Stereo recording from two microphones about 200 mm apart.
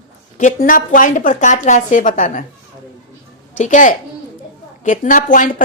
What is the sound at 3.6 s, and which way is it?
A woman's voice, 40° left (ahead or behind).